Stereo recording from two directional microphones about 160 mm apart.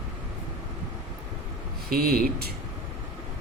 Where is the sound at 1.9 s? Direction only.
70° right (ahead or behind).